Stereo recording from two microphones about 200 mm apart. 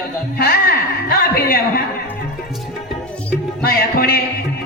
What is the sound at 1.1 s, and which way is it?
Speech, 50° left (ahead or behind).